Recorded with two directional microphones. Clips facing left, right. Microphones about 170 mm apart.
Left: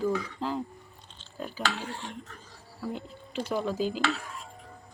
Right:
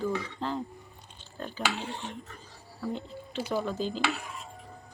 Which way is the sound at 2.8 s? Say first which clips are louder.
Right 1 dB; 5° left (ahead or behind).